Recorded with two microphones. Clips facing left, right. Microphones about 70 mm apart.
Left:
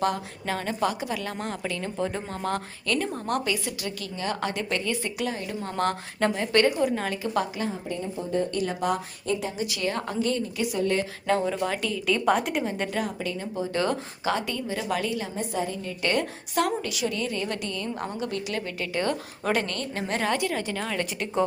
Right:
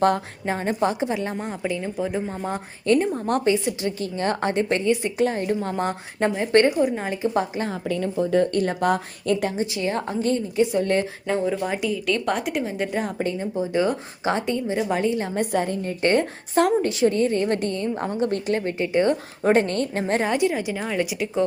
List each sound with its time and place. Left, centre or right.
0.4 s a woman's voice: right; by 2.6 s centre
2.8 s a woman's voice: right
5.2 s a woman's voice: right
5.7 s a woman's voice: centre
7.9 s speech: right
8.5 s a woman's voice: right
9.6 s a woman's voice: right
11.3 s a woman's voice: centre
12.0 s a woman's voice: centre
13.1 s a woman's voice: right
13.4 s a woman's voice: centre
15.4 s a woman's voice: right
20.2 s a woman's voice: centre